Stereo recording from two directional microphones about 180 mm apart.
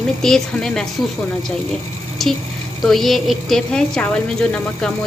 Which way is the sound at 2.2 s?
Centre (ahead or behind).